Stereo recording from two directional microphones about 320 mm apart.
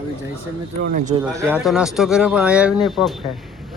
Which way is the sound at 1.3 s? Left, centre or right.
Centre.